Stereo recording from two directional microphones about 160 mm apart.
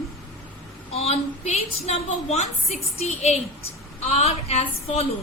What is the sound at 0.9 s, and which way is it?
A woman's voice, 40° left (ahead or behind).